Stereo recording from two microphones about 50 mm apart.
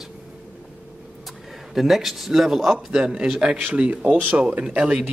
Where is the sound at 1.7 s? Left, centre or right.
Centre.